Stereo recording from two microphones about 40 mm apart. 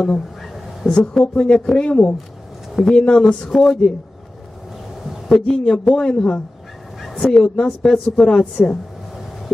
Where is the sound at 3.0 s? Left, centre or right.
Left.